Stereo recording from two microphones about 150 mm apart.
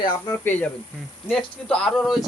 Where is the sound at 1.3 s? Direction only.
5° left (ahead or behind).